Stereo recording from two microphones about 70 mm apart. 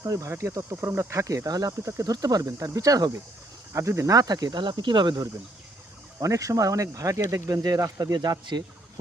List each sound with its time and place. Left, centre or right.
0.0 s speech: right
0.3 s speech: right
1.9 s speech: right
2.2 s speech: right
3.7 s speech: right
6.1 s speech: right
8.1 s speech: right